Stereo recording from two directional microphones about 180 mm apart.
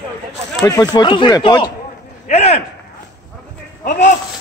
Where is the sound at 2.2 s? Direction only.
35° left (ahead or behind).